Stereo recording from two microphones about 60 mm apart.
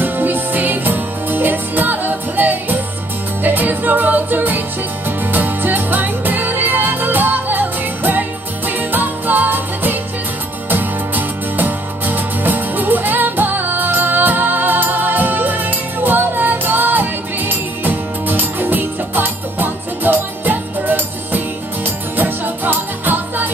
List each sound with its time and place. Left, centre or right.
0.0 s music: right